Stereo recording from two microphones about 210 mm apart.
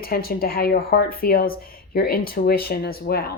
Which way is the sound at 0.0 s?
45° left (ahead or behind).